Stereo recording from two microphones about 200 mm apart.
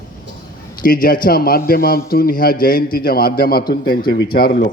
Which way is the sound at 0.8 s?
45° left (ahead or behind).